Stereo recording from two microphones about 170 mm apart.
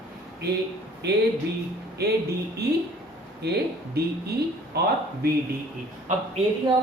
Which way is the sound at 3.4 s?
75° right (ahead or behind).